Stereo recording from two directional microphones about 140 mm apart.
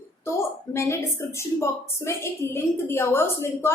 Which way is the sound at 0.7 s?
20° left (ahead or behind).